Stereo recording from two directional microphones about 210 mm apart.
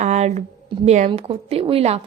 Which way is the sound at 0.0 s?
30° right (ahead or behind).